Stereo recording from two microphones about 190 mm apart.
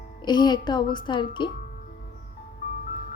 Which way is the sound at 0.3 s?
25° left (ahead or behind).